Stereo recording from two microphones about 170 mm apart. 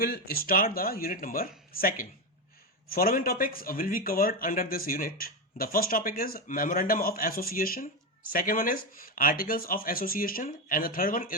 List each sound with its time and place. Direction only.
0.0 s speech: 65° left (ahead or behind)